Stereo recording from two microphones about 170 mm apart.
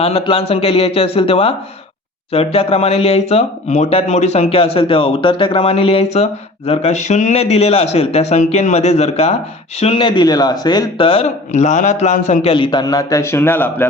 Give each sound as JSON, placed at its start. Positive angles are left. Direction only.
{"t": 0.0, "sound": "speech", "side_deg": 35}